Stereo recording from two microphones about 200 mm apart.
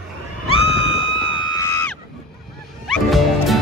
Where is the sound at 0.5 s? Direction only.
30° left (ahead or behind).